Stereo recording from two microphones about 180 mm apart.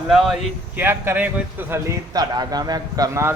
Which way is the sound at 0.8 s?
10° right (ahead or behind).